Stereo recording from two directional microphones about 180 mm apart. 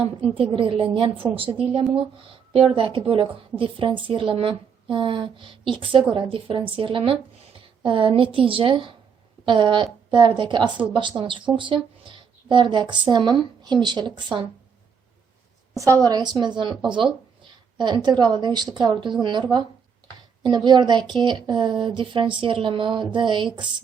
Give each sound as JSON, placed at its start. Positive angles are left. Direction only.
{"t": 0.5, "sound": "speech", "side_deg": -30}
{"t": 15.7, "sound": "a woman's voice", "side_deg": -15}